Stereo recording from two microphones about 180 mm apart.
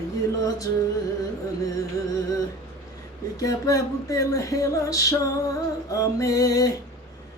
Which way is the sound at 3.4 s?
20° left (ahead or behind).